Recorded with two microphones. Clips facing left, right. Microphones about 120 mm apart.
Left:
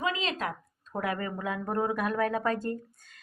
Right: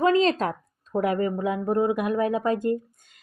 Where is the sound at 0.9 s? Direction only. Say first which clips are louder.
Right 8 dB; 25° right (ahead or behind).